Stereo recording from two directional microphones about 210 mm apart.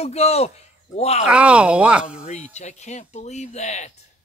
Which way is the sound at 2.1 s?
30° left (ahead or behind).